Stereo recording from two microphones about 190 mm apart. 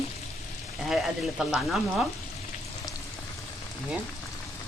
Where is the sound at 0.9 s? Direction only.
5° right (ahead or behind).